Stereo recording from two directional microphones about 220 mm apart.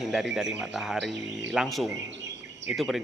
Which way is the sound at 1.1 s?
55° right (ahead or behind).